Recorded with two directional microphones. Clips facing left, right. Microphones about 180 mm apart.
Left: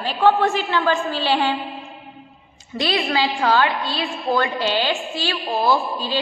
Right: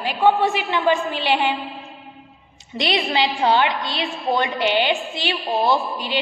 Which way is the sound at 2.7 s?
20° right (ahead or behind).